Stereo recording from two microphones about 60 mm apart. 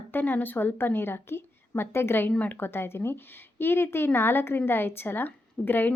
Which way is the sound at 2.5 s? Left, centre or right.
Left.